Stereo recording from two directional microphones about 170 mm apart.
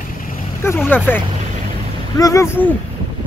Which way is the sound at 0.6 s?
15° left (ahead or behind).